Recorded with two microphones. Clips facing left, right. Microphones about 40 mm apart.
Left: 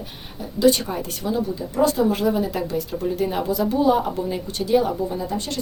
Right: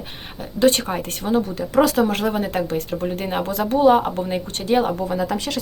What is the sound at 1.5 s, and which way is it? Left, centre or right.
Speech, right.